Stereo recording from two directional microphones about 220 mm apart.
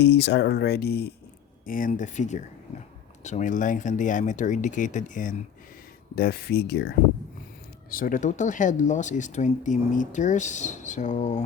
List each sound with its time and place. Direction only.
0.0 s speech: 55° left (ahead or behind); by 11.4 s 30° left (ahead or behind)